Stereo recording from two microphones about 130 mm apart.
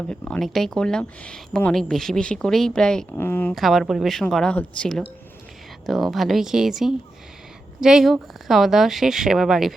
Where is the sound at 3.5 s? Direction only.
Centre (ahead or behind).